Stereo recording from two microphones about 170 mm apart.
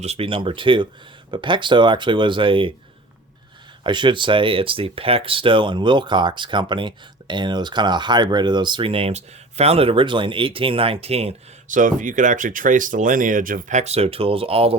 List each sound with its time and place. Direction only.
0.0 s speech: 35° right (ahead or behind)
3.8 s speech: 30° right (ahead or behind)